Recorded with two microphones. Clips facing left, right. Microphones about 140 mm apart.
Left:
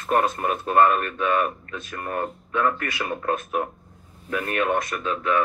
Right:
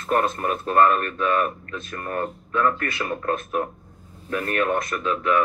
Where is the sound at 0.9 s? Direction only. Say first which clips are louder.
Right 1 dB; 35° right (ahead or behind).